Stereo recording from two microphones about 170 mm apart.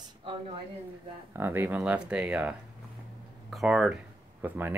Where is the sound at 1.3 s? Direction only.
15° right (ahead or behind).